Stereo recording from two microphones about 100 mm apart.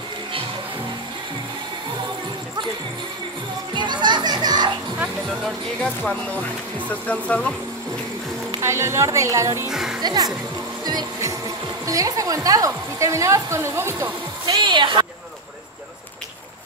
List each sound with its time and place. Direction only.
3.7 s music: 50° right (ahead or behind)
5.3 s speech: centre (ahead or behind)
5.9 s speech: 10° left (ahead or behind)
8.5 s speech: 25° right (ahead or behind)
9.7 s speech: 5° right (ahead or behind)
9.9 s speech: 40° right (ahead or behind)
10.8 s music: 45° right (ahead or behind)
11.1 s speech: 30° right (ahead or behind)
14.6 s speech: 50° right (ahead or behind)